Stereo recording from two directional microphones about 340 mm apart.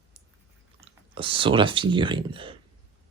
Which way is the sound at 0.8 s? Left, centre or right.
Centre.